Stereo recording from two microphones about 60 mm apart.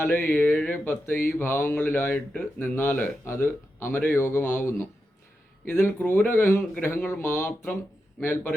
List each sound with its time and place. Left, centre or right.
0.1 s speech: left
7.1 s speech: left